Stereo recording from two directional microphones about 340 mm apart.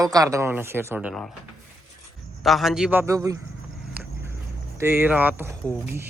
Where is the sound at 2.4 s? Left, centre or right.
Centre.